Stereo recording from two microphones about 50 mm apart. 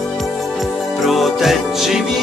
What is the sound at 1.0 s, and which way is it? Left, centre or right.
Music, centre.